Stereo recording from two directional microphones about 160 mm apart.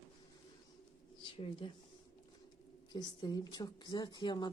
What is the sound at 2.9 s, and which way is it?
Speech, 25° left (ahead or behind).